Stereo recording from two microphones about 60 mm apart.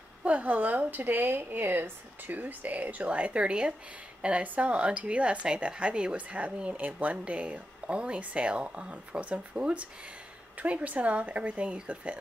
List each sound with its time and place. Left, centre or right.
0.2 s speech: right